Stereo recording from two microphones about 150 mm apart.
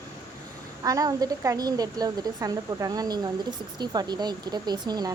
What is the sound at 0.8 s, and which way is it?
Speech, 25° right (ahead or behind).